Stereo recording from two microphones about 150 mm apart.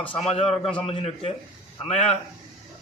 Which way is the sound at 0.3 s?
40° left (ahead or behind).